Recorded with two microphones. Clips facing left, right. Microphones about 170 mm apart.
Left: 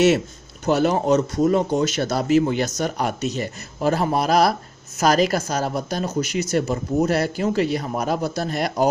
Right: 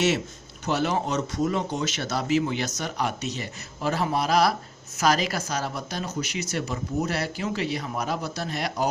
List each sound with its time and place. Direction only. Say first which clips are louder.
0.7 s speech: left 7 dB; 45° left (ahead or behind)